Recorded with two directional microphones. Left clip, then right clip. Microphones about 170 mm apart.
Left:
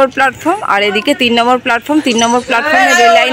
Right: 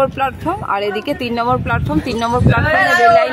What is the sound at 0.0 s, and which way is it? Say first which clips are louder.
A man's voice: left 6 dB; 30° left (ahead or behind).